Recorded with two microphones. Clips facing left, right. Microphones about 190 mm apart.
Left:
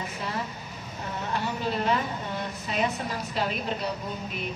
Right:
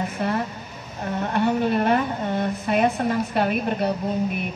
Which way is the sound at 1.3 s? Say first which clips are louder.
Right 9 dB; 60° right (ahead or behind).